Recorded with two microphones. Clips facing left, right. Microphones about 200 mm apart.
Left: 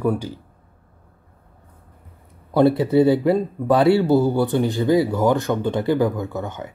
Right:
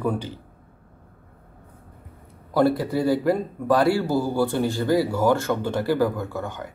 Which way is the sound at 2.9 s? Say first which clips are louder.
Left 5 dB; 20° left (ahead or behind).